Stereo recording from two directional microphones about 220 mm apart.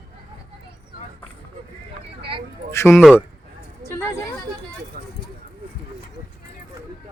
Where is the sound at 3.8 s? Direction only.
10° left (ahead or behind).